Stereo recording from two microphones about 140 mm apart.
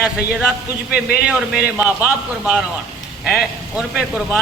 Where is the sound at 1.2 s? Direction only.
5° right (ahead or behind).